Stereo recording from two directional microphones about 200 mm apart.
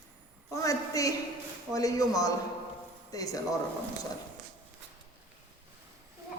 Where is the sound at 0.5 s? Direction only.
15° left (ahead or behind).